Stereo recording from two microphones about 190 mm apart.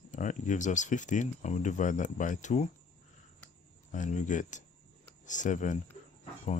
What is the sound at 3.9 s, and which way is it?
Speech, 40° left (ahead or behind).